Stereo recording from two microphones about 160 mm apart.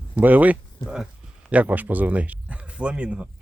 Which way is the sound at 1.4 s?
10° right (ahead or behind).